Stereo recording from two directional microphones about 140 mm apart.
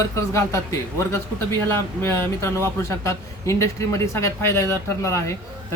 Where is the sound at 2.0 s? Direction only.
20° left (ahead or behind).